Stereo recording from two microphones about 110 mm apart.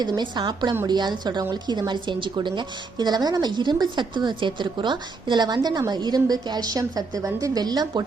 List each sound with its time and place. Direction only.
0.0 s a woman's voice: 40° right (ahead or behind)